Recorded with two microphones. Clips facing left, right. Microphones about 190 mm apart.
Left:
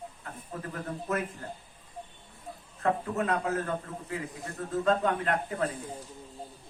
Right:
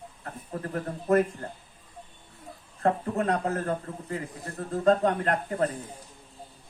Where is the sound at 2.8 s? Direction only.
40° right (ahead or behind).